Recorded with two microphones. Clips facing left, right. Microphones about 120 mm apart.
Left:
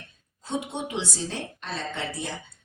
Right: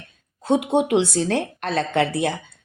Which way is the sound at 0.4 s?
60° right (ahead or behind).